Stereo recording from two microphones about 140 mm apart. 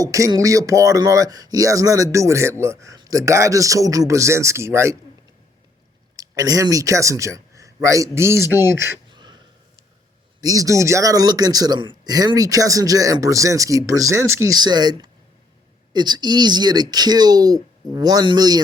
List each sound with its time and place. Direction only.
0.0 s speech: 25° right (ahead or behind)
6.1 s speech: 25° right (ahead or behind)
9.0 s a sound: 30° right (ahead or behind)
10.4 s speech: 25° right (ahead or behind)